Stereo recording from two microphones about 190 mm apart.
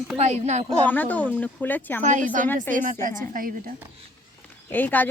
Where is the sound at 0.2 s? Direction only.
35° right (ahead or behind).